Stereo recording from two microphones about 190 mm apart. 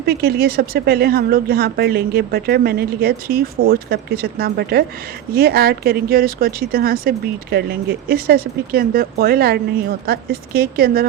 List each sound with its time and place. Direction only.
0.0 s speech: 55° right (ahead or behind)